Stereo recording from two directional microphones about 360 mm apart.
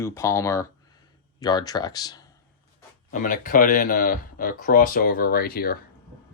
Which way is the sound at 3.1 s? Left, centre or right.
Left.